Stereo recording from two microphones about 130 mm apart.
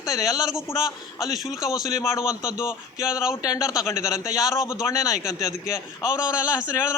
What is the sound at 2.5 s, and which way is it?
Music, 5° right (ahead or behind).